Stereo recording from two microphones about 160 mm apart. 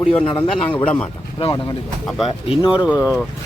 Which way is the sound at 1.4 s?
35° left (ahead or behind).